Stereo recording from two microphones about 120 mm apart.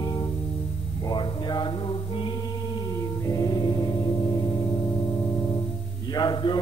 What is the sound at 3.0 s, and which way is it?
Music, 30° left (ahead or behind).